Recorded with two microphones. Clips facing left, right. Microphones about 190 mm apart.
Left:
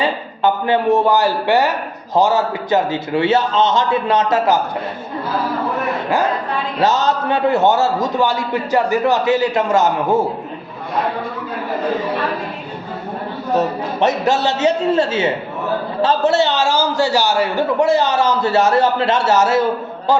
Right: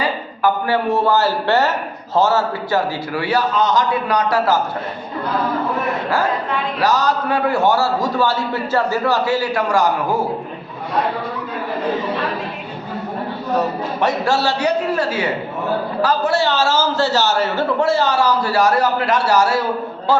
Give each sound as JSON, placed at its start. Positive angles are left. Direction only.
{"t": 0.0, "sound": "a man's voice", "side_deg": 20}
{"t": 6.7, "sound": "a man's voice", "side_deg": 25}
{"t": 14.0, "sound": "a man's voice", "side_deg": 20}